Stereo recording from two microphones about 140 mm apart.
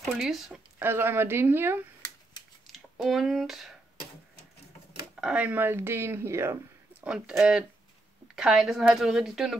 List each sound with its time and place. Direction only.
0.0 s a woman's voice: centre (ahead or behind)
0.7 s speech: 15° right (ahead or behind)
2.6 s speech: centre (ahead or behind)
5.2 s a woman's voice: 10° right (ahead or behind)